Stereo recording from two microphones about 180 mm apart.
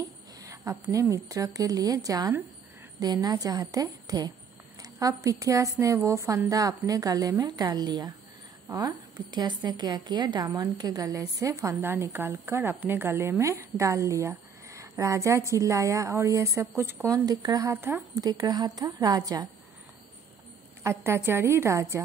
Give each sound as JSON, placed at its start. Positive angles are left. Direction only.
{"t": 0.4, "sound": "a woman's voice", "side_deg": -15}
{"t": 20.8, "sound": "a woman's voice", "side_deg": -15}